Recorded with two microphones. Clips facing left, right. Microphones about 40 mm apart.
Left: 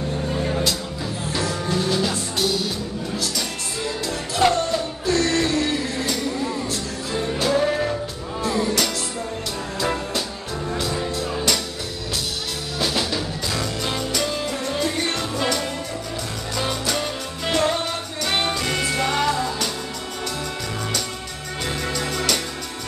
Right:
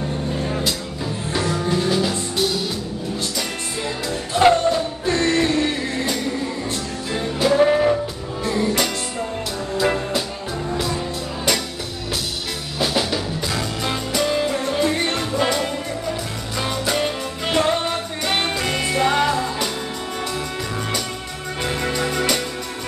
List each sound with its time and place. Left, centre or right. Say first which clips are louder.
1.3 s music: right 3 dB; right
1.9 s music: right 2 dB; centre
3.8 s music: even; right
7.3 s music: right 5 dB; centre
12.7 s music: right 2 dB; centre
21.6 s music: right 3 dB; centre